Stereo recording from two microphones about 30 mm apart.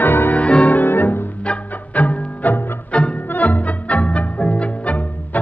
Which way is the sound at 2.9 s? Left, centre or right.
Left.